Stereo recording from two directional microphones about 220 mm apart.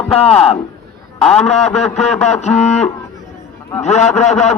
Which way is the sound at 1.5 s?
30° left (ahead or behind).